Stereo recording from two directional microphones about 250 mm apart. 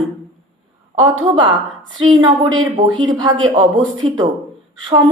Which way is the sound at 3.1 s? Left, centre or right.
Centre.